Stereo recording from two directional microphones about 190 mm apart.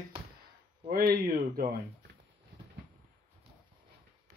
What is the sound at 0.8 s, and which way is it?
Speech, 50° right (ahead or behind).